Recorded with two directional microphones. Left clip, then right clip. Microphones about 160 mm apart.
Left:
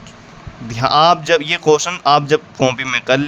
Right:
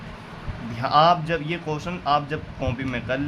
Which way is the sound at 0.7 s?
90° left.